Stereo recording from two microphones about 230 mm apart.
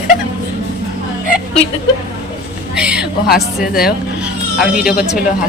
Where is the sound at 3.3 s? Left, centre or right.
Left.